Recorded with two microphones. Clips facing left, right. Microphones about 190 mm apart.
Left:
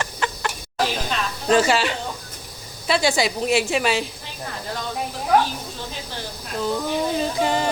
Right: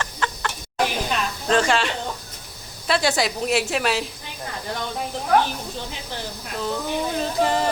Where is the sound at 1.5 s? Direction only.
5° left (ahead or behind).